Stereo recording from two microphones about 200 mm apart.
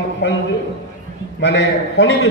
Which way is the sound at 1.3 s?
60° left (ahead or behind).